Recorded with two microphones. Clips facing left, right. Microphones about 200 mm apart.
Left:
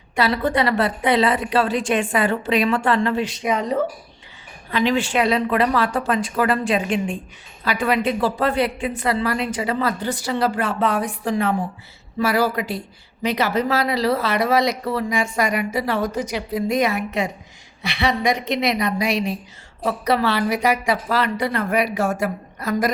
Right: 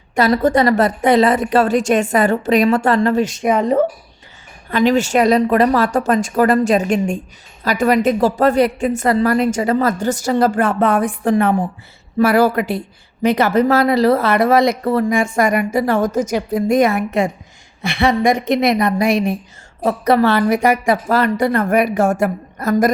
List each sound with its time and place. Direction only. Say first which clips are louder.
0.2 s speech: right 6 dB; 45° right (ahead or behind)
4.7 s a woman's voice: right 6 dB; 45° right (ahead or behind)